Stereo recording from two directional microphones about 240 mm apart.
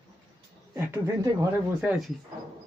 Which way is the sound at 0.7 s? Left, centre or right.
Centre.